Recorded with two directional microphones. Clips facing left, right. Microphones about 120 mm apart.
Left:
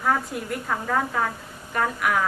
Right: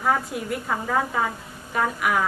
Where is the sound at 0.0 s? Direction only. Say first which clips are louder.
Right 1 dB; 5° right (ahead or behind).